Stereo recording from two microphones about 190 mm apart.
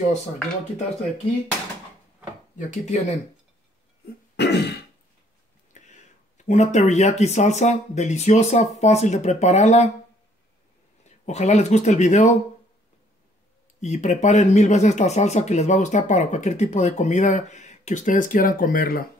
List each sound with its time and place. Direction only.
2.5 s speech: 35° left (ahead or behind)
4.4 s throat clearing: 60° left (ahead or behind)
5.7 s speech: 40° left (ahead or behind)
11.1 s speech: 35° left (ahead or behind)
13.7 s speech: 35° left (ahead or behind)